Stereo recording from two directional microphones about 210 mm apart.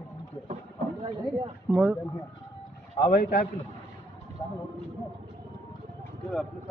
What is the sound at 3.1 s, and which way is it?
Speech, 45° left (ahead or behind).